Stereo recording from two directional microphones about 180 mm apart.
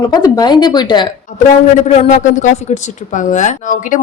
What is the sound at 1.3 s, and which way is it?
A woman's voice, 45° left (ahead or behind).